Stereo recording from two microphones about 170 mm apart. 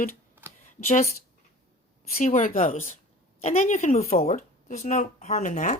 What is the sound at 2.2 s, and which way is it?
Speech, 50° left (ahead or behind).